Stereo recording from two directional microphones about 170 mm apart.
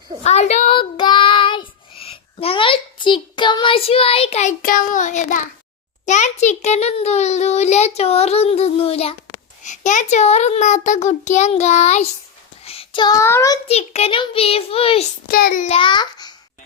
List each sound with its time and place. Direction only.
0.3 s a child's voice: 40° left (ahead or behind)
0.7 s child singing: 30° left (ahead or behind); by 5.5 s 45° left (ahead or behind)
6.1 s a child's voice: 45° left (ahead or behind)
9.6 s a child's voice: 45° left (ahead or behind)
12.6 s child singing: 30° left (ahead or behind)
13.7 s a child's voice: 40° left (ahead or behind)
15.3 s child singing: 60° left (ahead or behind)
15.6 s a child's voice: 35° left (ahead or behind)